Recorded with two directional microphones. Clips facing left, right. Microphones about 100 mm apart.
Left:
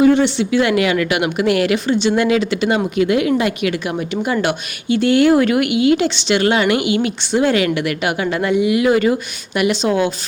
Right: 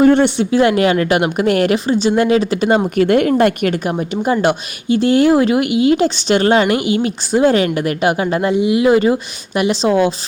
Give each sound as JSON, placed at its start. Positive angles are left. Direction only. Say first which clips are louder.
{"t": 0.0, "sound": "speech", "louder": "right 2 dB", "side_deg": -50}
{"t": 2.9, "sound": "speech", "louder": "right 3 dB", "side_deg": -50}
{"t": 4.1, "sound": "speech", "louder": "right 4 dB", "side_deg": -35}